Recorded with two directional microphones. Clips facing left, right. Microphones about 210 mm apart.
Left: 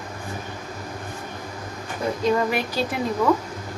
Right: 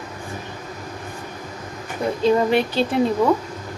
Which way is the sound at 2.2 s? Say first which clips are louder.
Right 5 dB; 25° right (ahead or behind).